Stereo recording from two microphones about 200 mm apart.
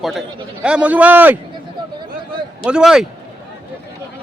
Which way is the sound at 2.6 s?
5° right (ahead or behind).